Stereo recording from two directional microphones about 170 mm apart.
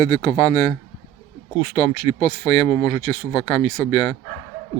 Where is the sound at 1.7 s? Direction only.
35° left (ahead or behind).